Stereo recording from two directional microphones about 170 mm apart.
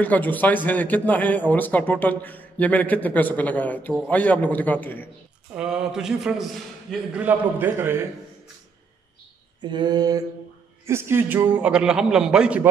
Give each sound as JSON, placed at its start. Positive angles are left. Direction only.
{"t": 0.0, "sound": "a man's voice", "side_deg": 10}
{"t": 5.5, "sound": "a man's voice", "side_deg": -5}
{"t": 9.6, "sound": "mantra", "side_deg": -25}
{"t": 10.9, "sound": "a man's voice", "side_deg": -15}